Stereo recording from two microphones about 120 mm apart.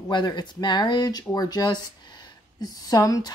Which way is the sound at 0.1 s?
40° left (ahead or behind).